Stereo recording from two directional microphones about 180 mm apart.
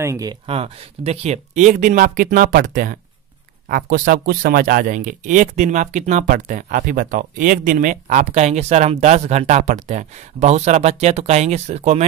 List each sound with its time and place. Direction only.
0.0 s speech: 20° right (ahead or behind)
0.5 s speech: 35° right (ahead or behind)